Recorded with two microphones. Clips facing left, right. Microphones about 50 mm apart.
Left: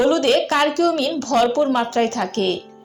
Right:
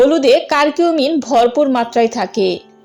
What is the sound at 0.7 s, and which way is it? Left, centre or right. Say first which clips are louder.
Speech: right 6 dB; right.